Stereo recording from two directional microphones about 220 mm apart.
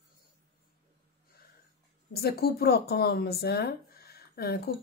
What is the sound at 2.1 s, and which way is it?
Speech, 45° left (ahead or behind).